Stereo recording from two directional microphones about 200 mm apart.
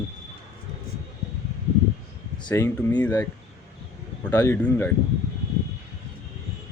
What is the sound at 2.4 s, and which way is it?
Speech, 10° left (ahead or behind).